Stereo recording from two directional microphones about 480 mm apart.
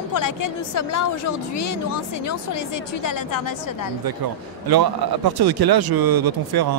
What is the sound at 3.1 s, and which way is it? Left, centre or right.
Speech, left.